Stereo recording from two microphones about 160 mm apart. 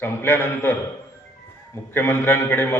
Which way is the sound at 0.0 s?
15° left (ahead or behind).